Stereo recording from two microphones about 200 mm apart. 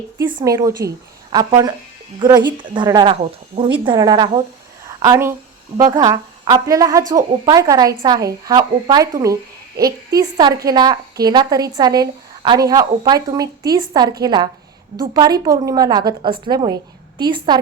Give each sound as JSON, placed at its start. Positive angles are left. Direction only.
{"t": 0.2, "sound": "a woman's voice", "side_deg": -20}